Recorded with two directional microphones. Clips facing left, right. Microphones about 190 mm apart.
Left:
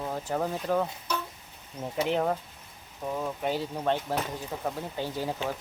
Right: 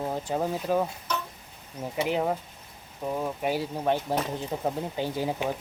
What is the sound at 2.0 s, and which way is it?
Speech, 5° right (ahead or behind).